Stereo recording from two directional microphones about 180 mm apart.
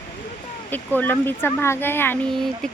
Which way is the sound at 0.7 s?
10° left (ahead or behind).